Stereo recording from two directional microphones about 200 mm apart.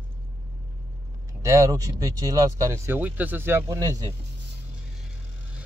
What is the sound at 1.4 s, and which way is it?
Speech, 15° right (ahead or behind).